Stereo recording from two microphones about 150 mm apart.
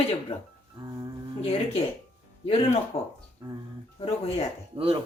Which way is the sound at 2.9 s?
45° left (ahead or behind).